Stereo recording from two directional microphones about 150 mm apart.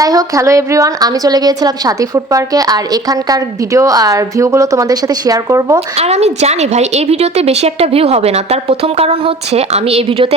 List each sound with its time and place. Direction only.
0.0 s a woman's voice: 25° right (ahead or behind)
6.0 s a woman's voice: 45° right (ahead or behind)